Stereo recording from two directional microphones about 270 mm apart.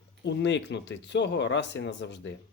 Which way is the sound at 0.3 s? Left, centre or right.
Left.